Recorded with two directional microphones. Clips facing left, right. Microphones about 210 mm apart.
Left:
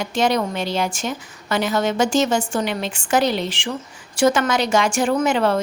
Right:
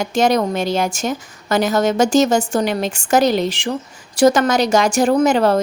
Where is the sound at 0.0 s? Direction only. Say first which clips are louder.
Right 4 dB; 45° right (ahead or behind).